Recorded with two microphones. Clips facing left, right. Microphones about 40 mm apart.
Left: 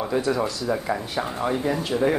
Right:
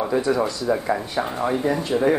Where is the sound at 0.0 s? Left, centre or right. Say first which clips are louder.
Right 3 dB; centre.